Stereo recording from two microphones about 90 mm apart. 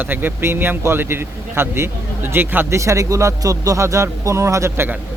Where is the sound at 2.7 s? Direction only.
35° right (ahead or behind).